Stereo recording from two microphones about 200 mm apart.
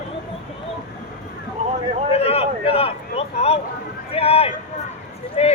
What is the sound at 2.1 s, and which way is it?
Speech, 30° left (ahead or behind).